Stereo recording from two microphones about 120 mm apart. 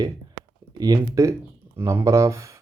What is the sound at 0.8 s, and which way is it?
Speech, 30° right (ahead or behind).